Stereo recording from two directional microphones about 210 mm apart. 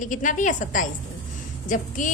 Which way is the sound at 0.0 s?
40° left (ahead or behind).